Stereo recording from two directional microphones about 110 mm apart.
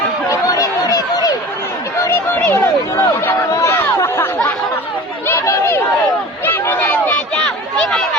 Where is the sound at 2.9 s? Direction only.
25° left (ahead or behind).